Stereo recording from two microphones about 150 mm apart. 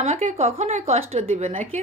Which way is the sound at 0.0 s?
50° right (ahead or behind).